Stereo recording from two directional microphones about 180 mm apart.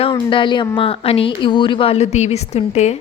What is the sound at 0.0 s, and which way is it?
A woman's voice, 30° left (ahead or behind).